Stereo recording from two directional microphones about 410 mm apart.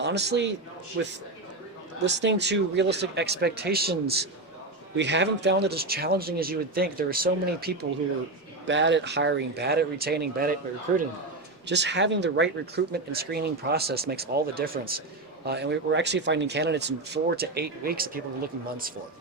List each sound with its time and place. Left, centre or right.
0.0 s speech: right
11.6 s speech: right